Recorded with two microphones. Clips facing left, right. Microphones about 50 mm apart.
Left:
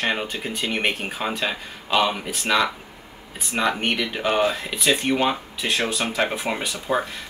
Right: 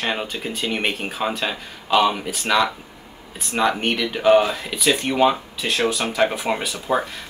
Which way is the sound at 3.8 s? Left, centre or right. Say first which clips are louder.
Right 6 dB; centre.